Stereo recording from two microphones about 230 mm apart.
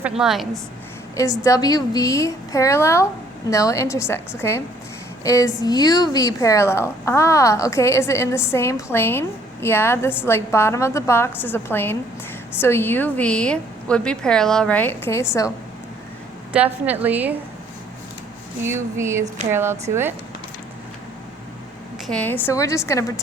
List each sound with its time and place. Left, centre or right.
0.2 s a woman's voice: centre
1.1 s a woman's voice: centre
16.5 s a woman's voice: centre
18.6 s a woman's voice: centre
22.0 s a woman's voice: centre